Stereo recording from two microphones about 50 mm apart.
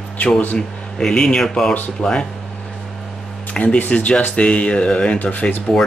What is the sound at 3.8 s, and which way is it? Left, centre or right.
Speech, left.